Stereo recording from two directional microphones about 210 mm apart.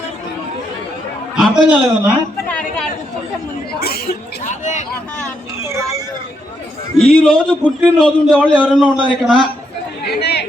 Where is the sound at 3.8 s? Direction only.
45° left (ahead or behind).